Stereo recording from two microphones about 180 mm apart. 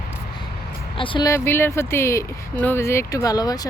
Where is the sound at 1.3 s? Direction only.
15° left (ahead or behind).